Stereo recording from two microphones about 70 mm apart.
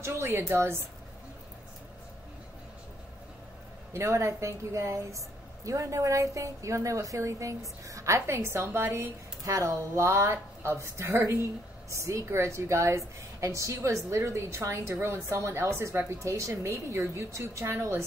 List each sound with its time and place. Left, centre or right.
0.0 s a woman's voice: right
3.9 s a woman's voice: right